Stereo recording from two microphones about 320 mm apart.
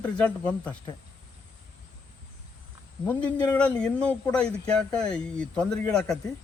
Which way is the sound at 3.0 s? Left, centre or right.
Centre.